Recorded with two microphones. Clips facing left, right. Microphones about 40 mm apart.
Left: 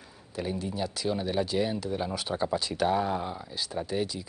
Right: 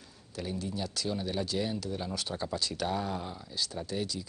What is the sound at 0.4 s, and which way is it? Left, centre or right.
Speech, centre.